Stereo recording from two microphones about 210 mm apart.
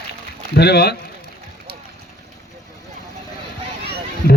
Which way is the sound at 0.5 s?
50° left (ahead or behind).